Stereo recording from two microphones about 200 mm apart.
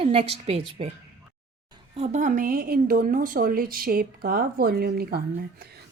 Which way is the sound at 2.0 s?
35° right (ahead or behind).